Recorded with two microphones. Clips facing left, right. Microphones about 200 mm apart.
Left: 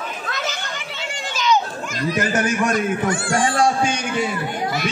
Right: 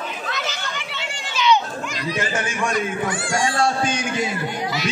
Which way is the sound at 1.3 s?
45° left (ahead or behind).